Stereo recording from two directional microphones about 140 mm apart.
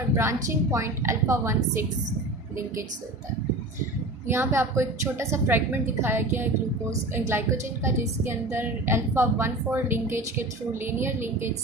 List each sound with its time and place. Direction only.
0.2 s a woman's voice: 20° right (ahead or behind)
4.3 s a woman's voice: 20° right (ahead or behind)